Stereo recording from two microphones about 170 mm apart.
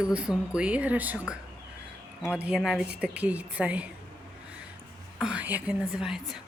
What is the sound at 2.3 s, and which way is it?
Speech, 5° right (ahead or behind).